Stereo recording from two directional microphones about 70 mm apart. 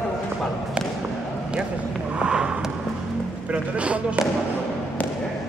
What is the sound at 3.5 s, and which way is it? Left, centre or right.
Speech, centre.